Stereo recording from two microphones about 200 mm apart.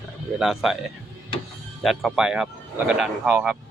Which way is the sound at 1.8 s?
Centre (ahead or behind).